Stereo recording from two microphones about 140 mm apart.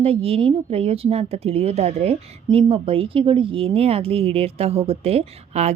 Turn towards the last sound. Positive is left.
turn(degrees=-50)  # may be behind; listen again after turning